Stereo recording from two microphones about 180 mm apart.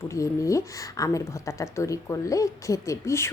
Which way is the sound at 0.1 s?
15° left (ahead or behind).